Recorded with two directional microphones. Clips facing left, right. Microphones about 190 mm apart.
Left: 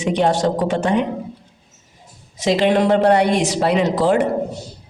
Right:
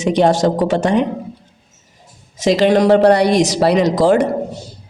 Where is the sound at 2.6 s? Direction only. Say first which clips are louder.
Right 4 dB; 40° right (ahead or behind).